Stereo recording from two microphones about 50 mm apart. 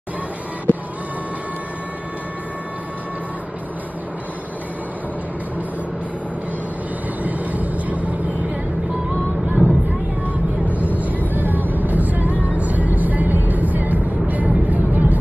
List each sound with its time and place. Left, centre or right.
0.7 s printer: left
7.2 s vehicle: right
9.5 s vehicle: right